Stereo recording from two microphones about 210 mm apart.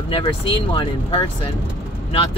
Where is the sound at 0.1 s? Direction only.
25° left (ahead or behind).